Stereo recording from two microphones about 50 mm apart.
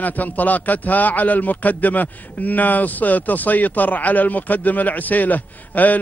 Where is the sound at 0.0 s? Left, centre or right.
Left.